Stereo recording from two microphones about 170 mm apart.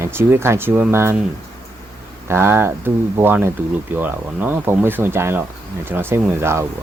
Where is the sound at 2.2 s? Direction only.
15° right (ahead or behind).